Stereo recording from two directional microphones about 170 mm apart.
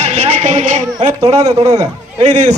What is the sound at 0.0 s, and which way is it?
Music, 40° right (ahead or behind).